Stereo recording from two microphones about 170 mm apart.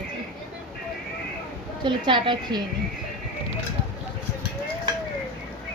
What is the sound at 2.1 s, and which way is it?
Child singing, 30° right (ahead or behind).